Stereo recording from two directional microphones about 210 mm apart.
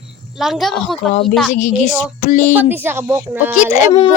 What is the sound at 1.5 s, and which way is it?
Speech, 35° left (ahead or behind).